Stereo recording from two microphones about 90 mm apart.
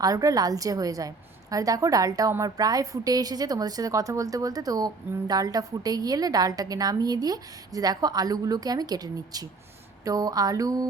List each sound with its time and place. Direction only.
0.0 s a woman's voice: 40° right (ahead or behind)